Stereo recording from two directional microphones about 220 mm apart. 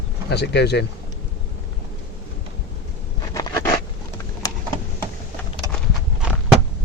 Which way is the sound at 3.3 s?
15° left (ahead or behind).